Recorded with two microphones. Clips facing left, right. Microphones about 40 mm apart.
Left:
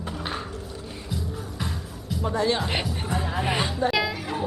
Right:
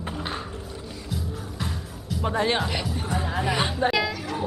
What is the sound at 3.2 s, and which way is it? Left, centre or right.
Music, centre.